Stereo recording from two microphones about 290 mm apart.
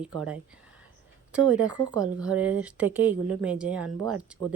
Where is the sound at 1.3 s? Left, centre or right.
Centre.